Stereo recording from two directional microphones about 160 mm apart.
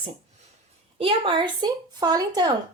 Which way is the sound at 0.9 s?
35° right (ahead or behind).